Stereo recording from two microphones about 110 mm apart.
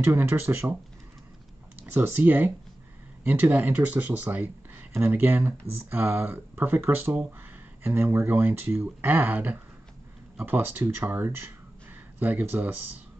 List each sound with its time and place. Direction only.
0.0 s speech: 20° right (ahead or behind)
1.9 s speech: 20° right (ahead or behind)